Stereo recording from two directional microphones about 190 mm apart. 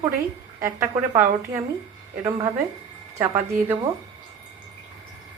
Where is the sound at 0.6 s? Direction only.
15° right (ahead or behind).